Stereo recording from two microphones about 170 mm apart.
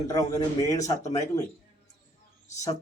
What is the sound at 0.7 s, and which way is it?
Speech, 20° left (ahead or behind).